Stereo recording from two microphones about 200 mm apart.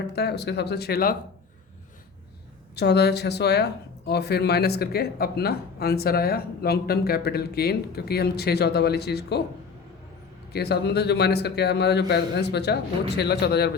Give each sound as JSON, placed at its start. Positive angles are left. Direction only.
{"t": 0.2, "sound": "speech", "side_deg": 55}
{"t": 2.7, "sound": "speech", "side_deg": 55}
{"t": 10.5, "sound": "a man's voice", "side_deg": 55}